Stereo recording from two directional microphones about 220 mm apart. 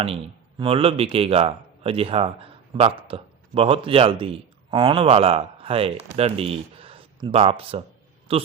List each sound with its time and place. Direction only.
0.6 s a man's voice: 25° right (ahead or behind)